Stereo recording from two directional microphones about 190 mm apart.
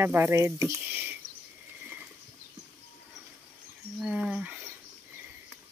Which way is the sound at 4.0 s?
5° right (ahead or behind).